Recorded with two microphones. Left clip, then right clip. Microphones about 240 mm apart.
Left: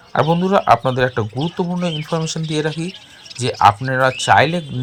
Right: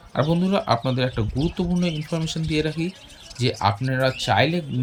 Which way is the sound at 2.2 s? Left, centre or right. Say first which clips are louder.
Left 4 dB; centre.